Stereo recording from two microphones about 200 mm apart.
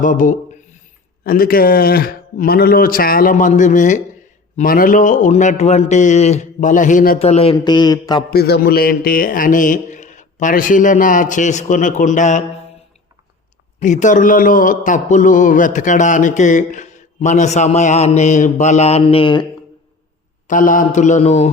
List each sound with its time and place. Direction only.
0.0 s a sound: 40° left (ahead or behind)
1.2 s a man's voice: 45° left (ahead or behind)
7.2 s speech: 30° left (ahead or behind)
8.3 s speech: 50° left (ahead or behind)
13.7 s speech: 35° left (ahead or behind)
20.5 s speech: 40° left (ahead or behind)